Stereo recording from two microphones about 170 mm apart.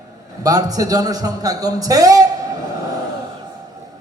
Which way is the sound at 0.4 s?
20° right (ahead or behind).